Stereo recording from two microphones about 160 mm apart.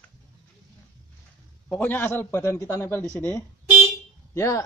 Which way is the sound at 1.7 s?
10° left (ahead or behind).